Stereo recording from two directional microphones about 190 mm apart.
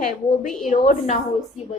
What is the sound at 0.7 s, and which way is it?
Speech, 35° left (ahead or behind).